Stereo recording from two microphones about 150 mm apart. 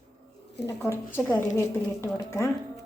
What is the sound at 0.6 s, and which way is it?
A woman's voice, 15° left (ahead or behind).